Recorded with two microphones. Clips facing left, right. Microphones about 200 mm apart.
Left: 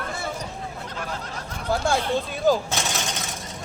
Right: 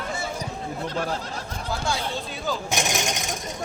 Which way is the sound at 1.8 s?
50° left (ahead or behind).